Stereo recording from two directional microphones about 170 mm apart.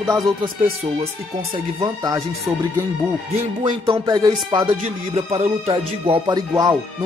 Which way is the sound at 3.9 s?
20° right (ahead or behind).